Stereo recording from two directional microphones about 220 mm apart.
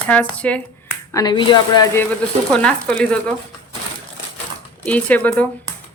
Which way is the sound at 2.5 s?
5° left (ahead or behind).